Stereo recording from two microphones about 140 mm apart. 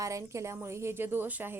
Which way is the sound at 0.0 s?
20° right (ahead or behind).